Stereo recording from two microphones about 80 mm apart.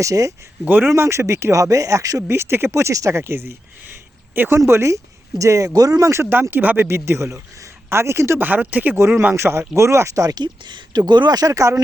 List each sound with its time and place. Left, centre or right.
0.0 s speech: right
0.6 s speech: right
0.9 s speech: right
2.3 s speech: right
8.4 s speech: right
9.3 s speech: right
10.4 s speech: right